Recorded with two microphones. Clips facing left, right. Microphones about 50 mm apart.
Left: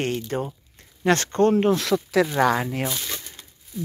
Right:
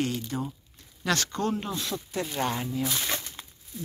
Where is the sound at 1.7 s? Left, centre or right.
Left.